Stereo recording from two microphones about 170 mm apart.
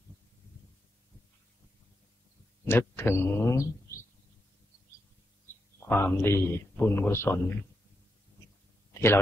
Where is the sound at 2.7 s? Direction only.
15° left (ahead or behind).